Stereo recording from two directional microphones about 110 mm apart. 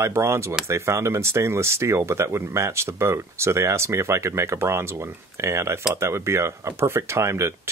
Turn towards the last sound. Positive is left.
turn(degrees=-25)  # may be behind; listen again after turning